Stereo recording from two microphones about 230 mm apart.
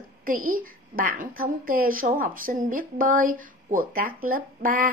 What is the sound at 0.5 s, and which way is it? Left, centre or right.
A woman's voice, right.